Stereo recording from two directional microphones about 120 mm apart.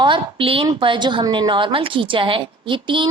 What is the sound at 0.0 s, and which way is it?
A woman's voice, 45° right (ahead or behind).